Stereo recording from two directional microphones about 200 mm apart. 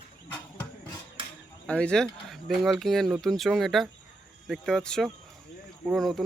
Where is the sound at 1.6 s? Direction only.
5° left (ahead or behind).